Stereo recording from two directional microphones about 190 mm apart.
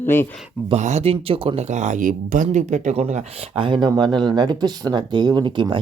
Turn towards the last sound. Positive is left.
turn(degrees=-25)  # may be behind; listen again after turning